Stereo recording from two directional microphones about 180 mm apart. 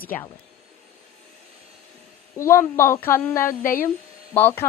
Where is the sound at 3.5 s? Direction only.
50° left (ahead or behind).